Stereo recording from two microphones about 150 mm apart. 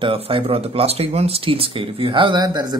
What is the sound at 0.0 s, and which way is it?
Speech, 35° right (ahead or behind).